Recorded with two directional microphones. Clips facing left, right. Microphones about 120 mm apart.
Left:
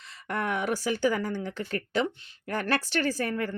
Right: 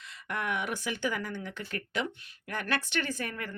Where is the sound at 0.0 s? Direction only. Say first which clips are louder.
Left 4 dB; 35° left (ahead or behind).